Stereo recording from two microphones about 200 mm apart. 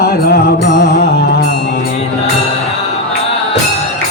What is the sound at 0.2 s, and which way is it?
Music, 55° left (ahead or behind).